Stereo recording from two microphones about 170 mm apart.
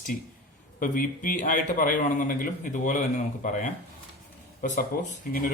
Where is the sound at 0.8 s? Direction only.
55° left (ahead or behind).